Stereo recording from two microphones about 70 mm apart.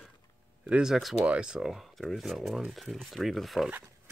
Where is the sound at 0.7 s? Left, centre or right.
Centre.